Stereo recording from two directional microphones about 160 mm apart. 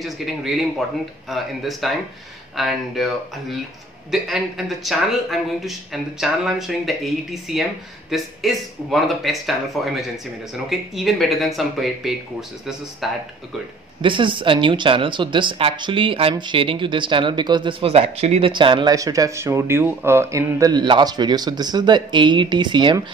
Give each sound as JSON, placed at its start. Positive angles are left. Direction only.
{"t": 0.0, "sound": "speech", "side_deg": 0}
{"t": 14.0, "sound": "speech", "side_deg": -30}